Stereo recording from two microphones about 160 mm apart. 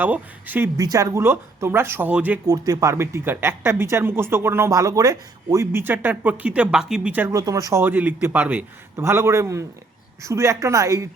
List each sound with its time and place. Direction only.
0.0 s speech: 10° right (ahead or behind)
0.8 s speech: 20° right (ahead or behind)
2.5 s a woman's voice: 20° right (ahead or behind)